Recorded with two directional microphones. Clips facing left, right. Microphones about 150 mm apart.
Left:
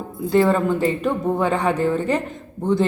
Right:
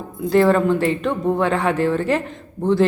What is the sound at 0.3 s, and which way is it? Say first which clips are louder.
Speech: right 2 dB; centre (ahead or behind).